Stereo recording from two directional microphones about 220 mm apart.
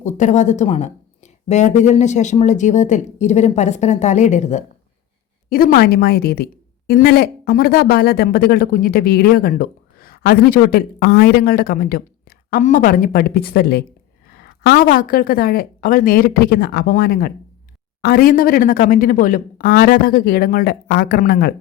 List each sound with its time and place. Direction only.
0.0 s a woman's voice: 35° left (ahead or behind)